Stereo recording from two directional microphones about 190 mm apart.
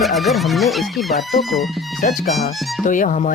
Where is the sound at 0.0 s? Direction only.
Centre (ahead or behind).